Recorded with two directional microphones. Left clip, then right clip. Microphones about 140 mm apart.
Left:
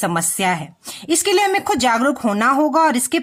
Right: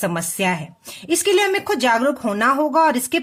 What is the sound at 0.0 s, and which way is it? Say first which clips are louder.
A woman's voice: left 2 dB; 30° left (ahead or behind).